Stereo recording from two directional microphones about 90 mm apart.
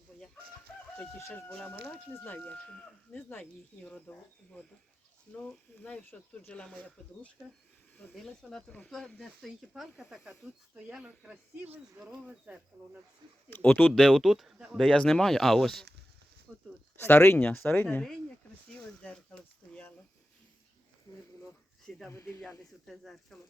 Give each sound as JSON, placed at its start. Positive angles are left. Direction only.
{"t": 1.3, "sound": "speech", "side_deg": 15}
{"t": 4.1, "sound": "speech", "side_deg": 20}
{"t": 5.3, "sound": "speech", "side_deg": 15}
{"t": 10.8, "sound": "speech", "side_deg": -15}
{"t": 12.3, "sound": "speech", "side_deg": -5}
{"t": 13.5, "sound": "speech", "side_deg": 15}
{"t": 13.9, "sound": "speech", "side_deg": 0}
{"t": 14.9, "sound": "speech", "side_deg": 5}
{"t": 17.0, "sound": "speech", "side_deg": 25}
{"t": 19.0, "sound": "speech", "side_deg": 10}
{"t": 21.8, "sound": "speech", "side_deg": 10}
{"t": 22.1, "sound": "speech", "side_deg": 30}
{"t": 22.9, "sound": "speech", "side_deg": 0}